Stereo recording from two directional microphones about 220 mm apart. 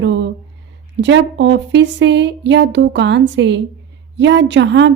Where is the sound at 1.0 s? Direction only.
55° right (ahead or behind).